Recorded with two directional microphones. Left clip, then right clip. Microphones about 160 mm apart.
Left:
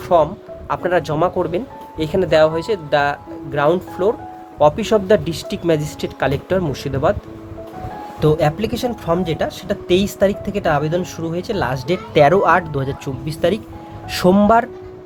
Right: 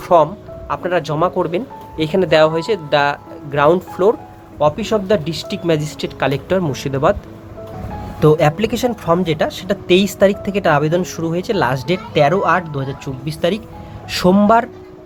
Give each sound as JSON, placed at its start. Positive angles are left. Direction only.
{"t": 0.1, "sound": "speech", "side_deg": -5}
{"t": 0.7, "sound": "speech", "side_deg": 5}
{"t": 3.9, "sound": "speech", "side_deg": -15}
{"t": 4.6, "sound": "speech", "side_deg": 10}
{"t": 8.2, "sound": "speech", "side_deg": -5}
{"t": 12.1, "sound": "speech", "side_deg": 15}